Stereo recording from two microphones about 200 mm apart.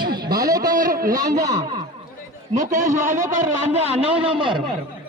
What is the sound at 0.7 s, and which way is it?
Speech, 45° right (ahead or behind).